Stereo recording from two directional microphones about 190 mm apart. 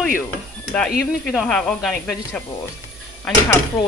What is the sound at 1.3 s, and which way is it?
Speech, 5° left (ahead or behind).